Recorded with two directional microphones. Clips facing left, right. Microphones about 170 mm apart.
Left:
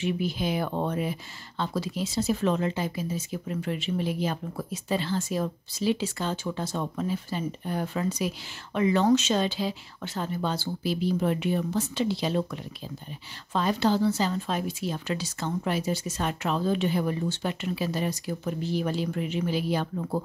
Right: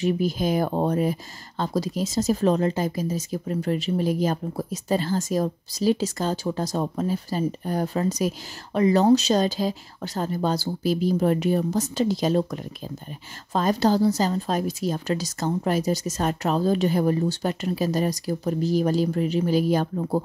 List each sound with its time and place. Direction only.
0.0 s speech: 40° right (ahead or behind)